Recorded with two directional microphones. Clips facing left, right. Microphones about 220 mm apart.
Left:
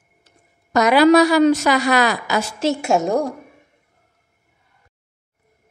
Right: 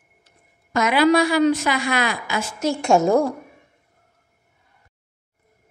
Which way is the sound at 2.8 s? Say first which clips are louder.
Right 5 dB; centre (ahead or behind).